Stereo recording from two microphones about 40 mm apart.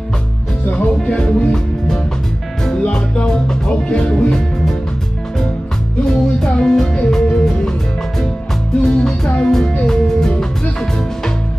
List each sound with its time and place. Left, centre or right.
0.7 s music: left
6.0 s music: centre
8.8 s music: centre